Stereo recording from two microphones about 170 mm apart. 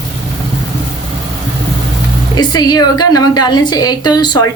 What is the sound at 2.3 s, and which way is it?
A woman's voice, 25° left (ahead or behind).